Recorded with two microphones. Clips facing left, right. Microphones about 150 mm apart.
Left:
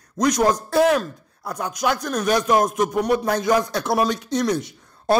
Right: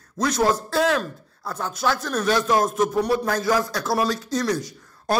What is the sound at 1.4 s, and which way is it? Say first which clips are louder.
A man's voice: left 2 dB; 15° left (ahead or behind).